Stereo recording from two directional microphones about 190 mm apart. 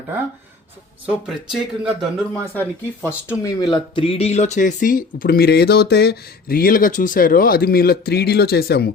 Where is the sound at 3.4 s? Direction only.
20° left (ahead or behind).